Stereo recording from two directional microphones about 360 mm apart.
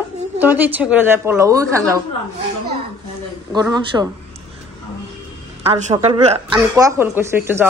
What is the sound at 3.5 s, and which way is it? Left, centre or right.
Speech, centre.